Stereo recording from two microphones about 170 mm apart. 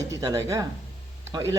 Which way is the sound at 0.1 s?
20° right (ahead or behind).